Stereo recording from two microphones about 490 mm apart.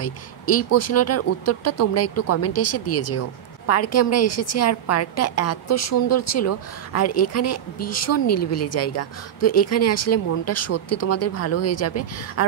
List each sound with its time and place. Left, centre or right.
0.0 s speech: left